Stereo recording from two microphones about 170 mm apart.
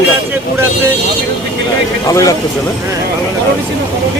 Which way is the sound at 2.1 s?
20° left (ahead or behind).